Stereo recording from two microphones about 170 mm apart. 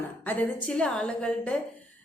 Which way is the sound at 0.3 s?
10° left (ahead or behind).